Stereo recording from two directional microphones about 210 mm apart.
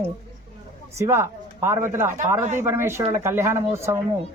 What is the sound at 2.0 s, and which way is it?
Speech, 35° right (ahead or behind).